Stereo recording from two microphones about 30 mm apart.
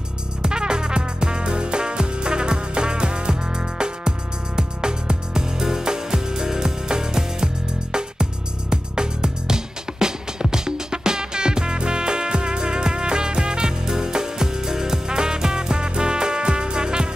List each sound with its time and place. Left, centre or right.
0.4 s music: right